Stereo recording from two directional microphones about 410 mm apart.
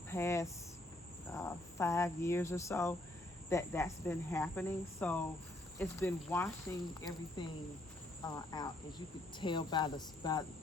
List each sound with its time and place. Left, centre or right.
0.1 s speech: centre